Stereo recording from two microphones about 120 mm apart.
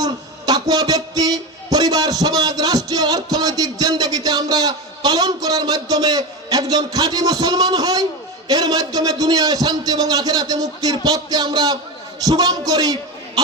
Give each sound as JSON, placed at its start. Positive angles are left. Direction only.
{"t": 0.0, "sound": "a man's voice", "side_deg": -30}